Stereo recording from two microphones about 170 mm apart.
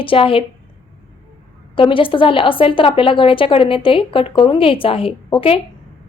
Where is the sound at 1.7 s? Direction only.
30° left (ahead or behind).